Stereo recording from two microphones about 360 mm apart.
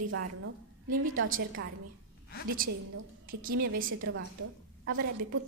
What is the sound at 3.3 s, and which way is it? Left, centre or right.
A woman's voice, right.